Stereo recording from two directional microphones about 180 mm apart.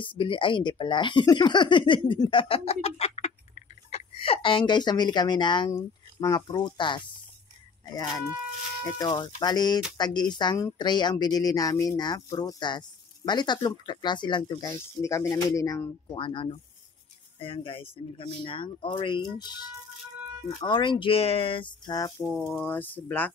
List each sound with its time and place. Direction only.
0.0 s speech: 30° left (ahead or behind)
20.6 s speech: 25° left (ahead or behind); by 23.3 s 10° left (ahead or behind)